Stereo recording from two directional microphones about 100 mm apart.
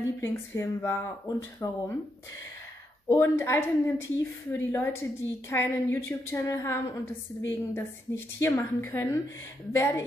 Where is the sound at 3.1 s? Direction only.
30° left (ahead or behind).